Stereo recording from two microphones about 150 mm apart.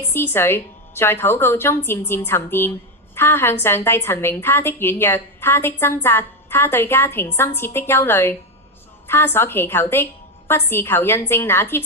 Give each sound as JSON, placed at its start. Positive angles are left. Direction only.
{"t": 0.1, "sound": "a woman's voice", "side_deg": 15}